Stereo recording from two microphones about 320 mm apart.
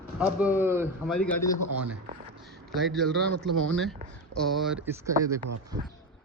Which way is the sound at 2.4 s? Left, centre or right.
Centre.